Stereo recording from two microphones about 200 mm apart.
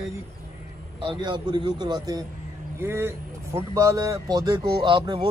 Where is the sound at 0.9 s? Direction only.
25° right (ahead or behind).